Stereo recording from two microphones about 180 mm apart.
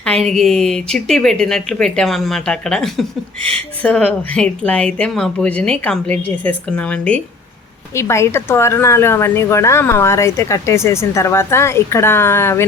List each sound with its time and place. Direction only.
0.0 s a woman's voice: 5° left (ahead or behind)